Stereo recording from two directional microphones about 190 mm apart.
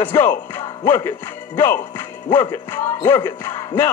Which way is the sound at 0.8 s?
15° left (ahead or behind).